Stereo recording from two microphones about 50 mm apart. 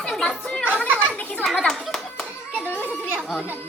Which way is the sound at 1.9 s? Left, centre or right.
Centre.